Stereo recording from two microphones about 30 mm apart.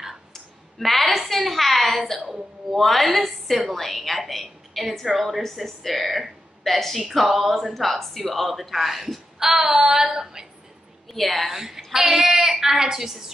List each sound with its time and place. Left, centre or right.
0.7 s a woman's voice: centre
7.7 s a woman's voice: centre; by 10.5 s right
11.1 s a woman's voice: centre
11.5 s speech: centre